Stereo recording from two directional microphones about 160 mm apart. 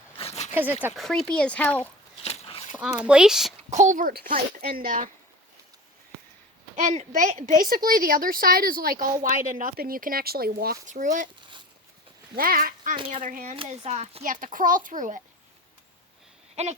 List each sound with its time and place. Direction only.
0.2 s a sound: 40° left (ahead or behind)
0.5 s speech: 10° right (ahead or behind)
0.9 s speech: centre (ahead or behind)
2.2 s a sound: 40° left (ahead or behind)
2.7 s speech: 10° right (ahead or behind)
3.7 s a woman's voice: 50° right (ahead or behind); by 5.0 s 65° right (ahead or behind)
6.7 s a woman's voice: 50° right (ahead or behind); by 10.8 s 70° right (ahead or behind)
10.8 s speech: 50° right (ahead or behind)
12.4 s a woman's voice: 65° right (ahead or behind)
13.0 s speech: 45° right (ahead or behind)
13.6 s speech: 40° right (ahead or behind)
14.3 s a woman's voice: 55° right (ahead or behind)
16.6 s a sound: 40° right (ahead or behind)